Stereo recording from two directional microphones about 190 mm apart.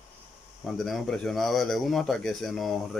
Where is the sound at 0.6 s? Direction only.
Centre (ahead or behind).